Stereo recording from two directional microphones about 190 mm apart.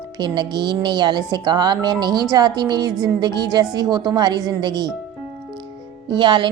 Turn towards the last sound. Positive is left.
turn(degrees=-25)  # may be behind; listen again after turning